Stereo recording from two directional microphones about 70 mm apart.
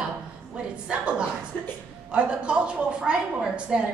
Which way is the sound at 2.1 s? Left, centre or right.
Centre.